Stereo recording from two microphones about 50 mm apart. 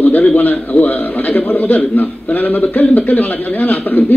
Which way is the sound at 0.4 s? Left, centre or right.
Left.